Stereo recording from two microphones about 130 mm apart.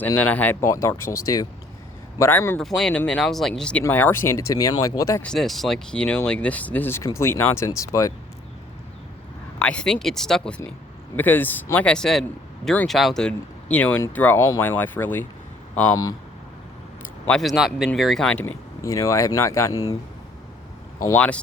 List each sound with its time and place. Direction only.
0.0 s speech: 10° left (ahead or behind)
2.6 s speech: 5° left (ahead or behind); by 5.2 s 25° left (ahead or behind)
5.2 s speech: 5° left (ahead or behind); by 8.1 s 25° left (ahead or behind)
9.6 s speech: 5° left (ahead or behind)
11.2 s speech: 15° left (ahead or behind)
12.9 s speech: centre (ahead or behind); by 15.3 s 15° left (ahead or behind)
17.2 s speech: centre (ahead or behind)
18.8 s speech: 25° left (ahead or behind)
21.1 s speech: 10° left (ahead or behind)